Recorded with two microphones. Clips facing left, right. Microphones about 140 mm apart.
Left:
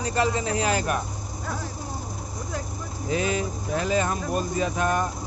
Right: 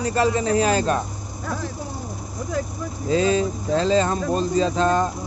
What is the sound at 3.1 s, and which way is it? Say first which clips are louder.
Speech: right 6 dB; 20° left (ahead or behind).